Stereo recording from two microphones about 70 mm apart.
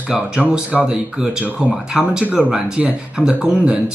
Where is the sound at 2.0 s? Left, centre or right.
Centre.